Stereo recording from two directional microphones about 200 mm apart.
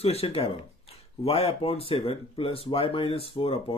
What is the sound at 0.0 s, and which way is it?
Speech, 30° left (ahead or behind).